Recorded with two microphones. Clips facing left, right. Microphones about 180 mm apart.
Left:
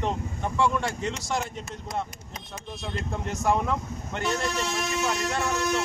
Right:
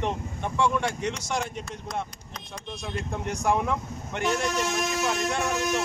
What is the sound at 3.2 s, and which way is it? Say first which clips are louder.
Speech: even; 15° right (ahead or behind).